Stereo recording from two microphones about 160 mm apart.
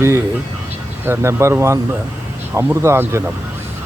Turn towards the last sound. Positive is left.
turn(degrees=-15)  # may be behind; listen again after turning